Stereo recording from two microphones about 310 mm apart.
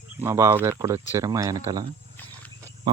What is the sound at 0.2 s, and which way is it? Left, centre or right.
Speech, centre.